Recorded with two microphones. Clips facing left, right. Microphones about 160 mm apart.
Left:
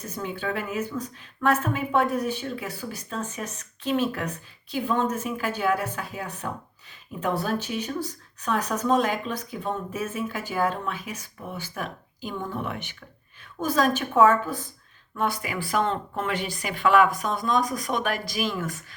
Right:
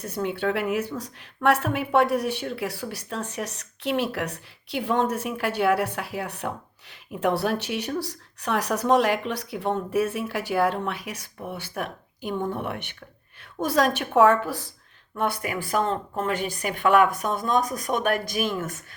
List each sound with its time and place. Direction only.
0.0 s a woman's voice: 65° right (ahead or behind)
15.2 s speech: 55° right (ahead or behind)
15.7 s speech: 40° right (ahead or behind)